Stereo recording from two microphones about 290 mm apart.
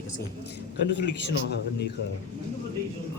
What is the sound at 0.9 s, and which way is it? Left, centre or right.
Speech, left.